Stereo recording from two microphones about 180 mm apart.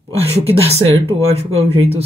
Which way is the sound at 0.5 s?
35° right (ahead or behind).